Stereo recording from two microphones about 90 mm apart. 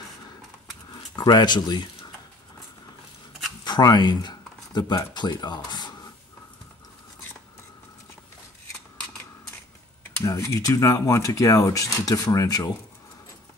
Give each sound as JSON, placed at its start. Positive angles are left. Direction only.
{"t": 0.9, "sound": "speech", "side_deg": 50}
{"t": 3.6, "sound": "speech", "side_deg": 55}
{"t": 10.2, "sound": "speech", "side_deg": 35}